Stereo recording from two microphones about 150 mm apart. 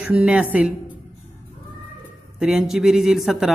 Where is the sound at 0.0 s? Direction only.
10° right (ahead or behind).